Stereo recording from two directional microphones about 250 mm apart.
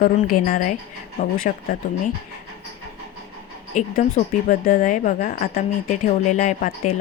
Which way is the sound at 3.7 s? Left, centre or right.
Left.